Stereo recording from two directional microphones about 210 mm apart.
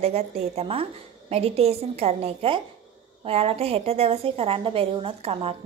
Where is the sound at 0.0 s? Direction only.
30° right (ahead or behind).